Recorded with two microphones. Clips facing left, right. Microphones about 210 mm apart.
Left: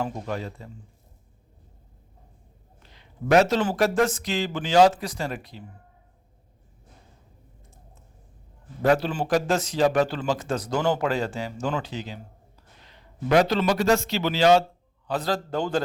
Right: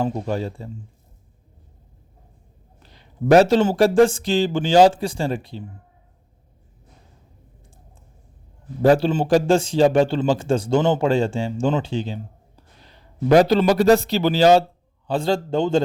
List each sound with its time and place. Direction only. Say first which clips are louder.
0.0 s a man's voice: right 6 dB; 30° right (ahead or behind)
2.9 s a man's voice: right 5 dB; 35° right (ahead or behind)
8.8 s a man's voice: right 6 dB; 30° right (ahead or behind)